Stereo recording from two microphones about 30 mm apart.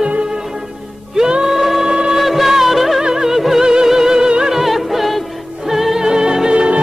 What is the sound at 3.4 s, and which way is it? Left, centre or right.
Music, centre.